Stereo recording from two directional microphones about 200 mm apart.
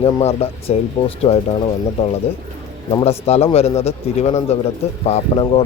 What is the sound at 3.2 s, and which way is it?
Speech, 30° left (ahead or behind).